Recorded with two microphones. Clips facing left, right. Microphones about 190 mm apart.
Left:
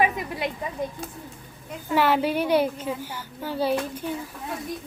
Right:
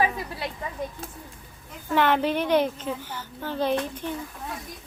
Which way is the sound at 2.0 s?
10° left (ahead or behind).